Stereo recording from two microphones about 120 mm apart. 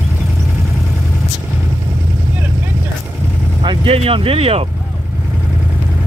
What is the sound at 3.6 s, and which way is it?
Speech, 55° right (ahead or behind).